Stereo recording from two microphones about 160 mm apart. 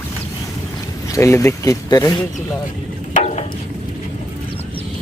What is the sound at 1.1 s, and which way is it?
Speech, 20° left (ahead or behind).